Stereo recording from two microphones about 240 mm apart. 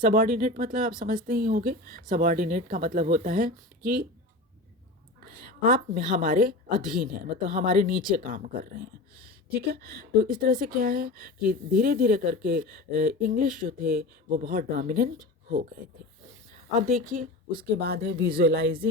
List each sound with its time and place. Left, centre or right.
0.0 s speech: right
5.2 s a woman's voice: right
8.0 s speech: right
16.8 s speech: right